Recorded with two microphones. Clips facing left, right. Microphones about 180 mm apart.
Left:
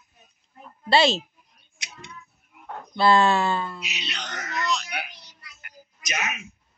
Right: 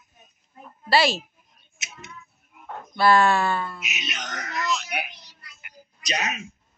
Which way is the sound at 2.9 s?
20° left (ahead or behind).